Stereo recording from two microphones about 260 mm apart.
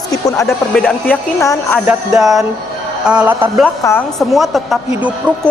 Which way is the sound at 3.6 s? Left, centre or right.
Centre.